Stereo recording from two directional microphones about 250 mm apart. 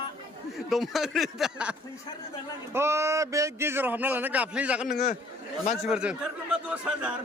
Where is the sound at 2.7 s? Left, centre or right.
Centre.